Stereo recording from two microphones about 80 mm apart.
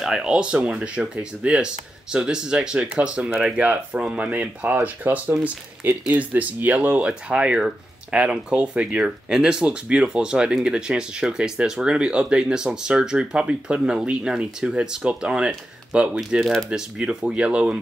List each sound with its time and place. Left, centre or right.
0.0 s speech: centre